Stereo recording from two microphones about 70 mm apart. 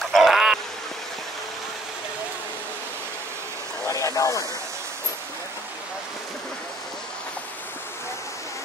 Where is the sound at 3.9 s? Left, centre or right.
Left.